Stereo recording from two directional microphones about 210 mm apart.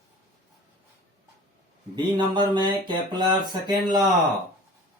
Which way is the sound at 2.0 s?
20° right (ahead or behind).